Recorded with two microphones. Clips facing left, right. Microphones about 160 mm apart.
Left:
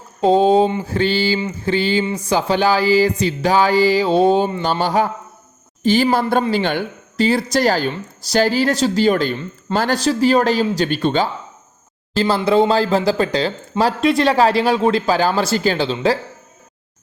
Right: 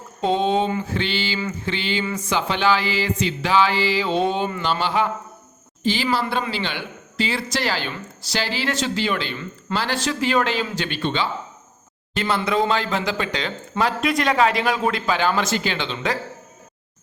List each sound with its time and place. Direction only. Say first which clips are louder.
0.2 s speech: left 7 dB; 35° left (ahead or behind)
12.1 s speech: left 7 dB; 30° left (ahead or behind)